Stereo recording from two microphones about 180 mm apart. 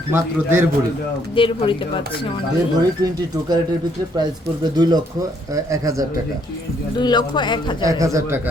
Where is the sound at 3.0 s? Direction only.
20° right (ahead or behind).